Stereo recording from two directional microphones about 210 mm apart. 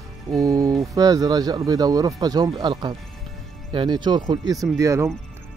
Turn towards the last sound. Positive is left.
turn(degrees=-15)  # may be behind; listen again after turning